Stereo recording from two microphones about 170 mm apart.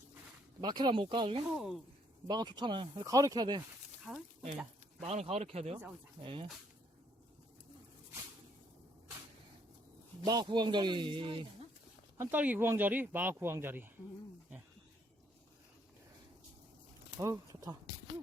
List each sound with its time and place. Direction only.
0.6 s speech: 25° right (ahead or behind)
1.5 s a woman's voice: centre (ahead or behind)
2.2 s speech: 25° right (ahead or behind)
4.1 s a woman's voice: centre (ahead or behind)
5.0 s speech: 40° right (ahead or behind)
10.2 s speech: 25° right (ahead or behind)
12.1 s speech: 10° right (ahead or behind)
17.2 s speech: 20° right (ahead or behind)